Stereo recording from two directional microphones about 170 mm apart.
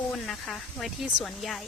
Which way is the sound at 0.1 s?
Centre (ahead or behind).